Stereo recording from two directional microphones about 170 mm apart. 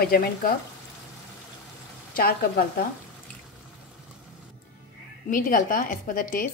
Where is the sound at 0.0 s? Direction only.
60° left (ahead or behind).